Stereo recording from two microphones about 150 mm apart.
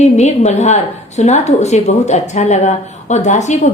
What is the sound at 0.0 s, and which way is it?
A woman's voice, 50° left (ahead or behind).